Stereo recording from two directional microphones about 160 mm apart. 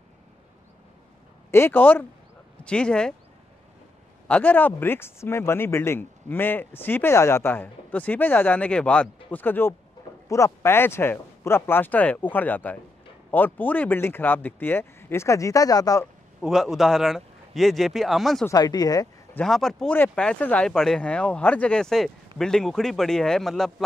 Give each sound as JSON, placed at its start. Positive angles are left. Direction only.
{"t": 1.5, "sound": "speech", "side_deg": 15}
{"t": 4.3, "sound": "speech", "side_deg": 10}
{"t": 16.3, "sound": "speech", "side_deg": 0}
{"t": 18.5, "sound": "speech", "side_deg": 25}
{"t": 19.3, "sound": "speech", "side_deg": 0}